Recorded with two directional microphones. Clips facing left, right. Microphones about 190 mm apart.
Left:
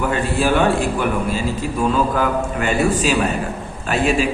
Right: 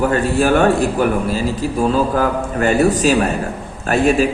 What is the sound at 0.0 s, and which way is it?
A man's voice, 45° right (ahead or behind).